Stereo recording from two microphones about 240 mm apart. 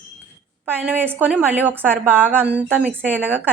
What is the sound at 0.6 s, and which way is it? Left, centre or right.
A woman's voice, centre.